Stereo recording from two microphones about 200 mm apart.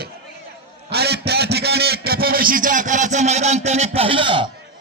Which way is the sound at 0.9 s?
55° right (ahead or behind).